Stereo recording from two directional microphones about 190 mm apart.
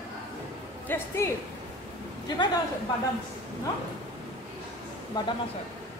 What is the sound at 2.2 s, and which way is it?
Speech, 25° left (ahead or behind).